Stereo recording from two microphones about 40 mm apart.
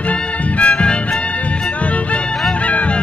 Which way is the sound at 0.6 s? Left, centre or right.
Left.